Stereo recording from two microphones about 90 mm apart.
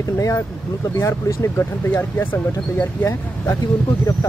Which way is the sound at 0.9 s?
35° left (ahead or behind).